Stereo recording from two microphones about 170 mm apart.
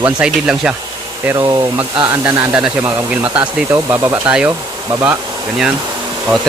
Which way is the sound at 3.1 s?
10° right (ahead or behind).